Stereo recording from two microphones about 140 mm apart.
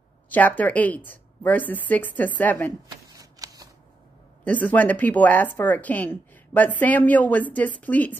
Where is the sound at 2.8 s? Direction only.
25° right (ahead or behind).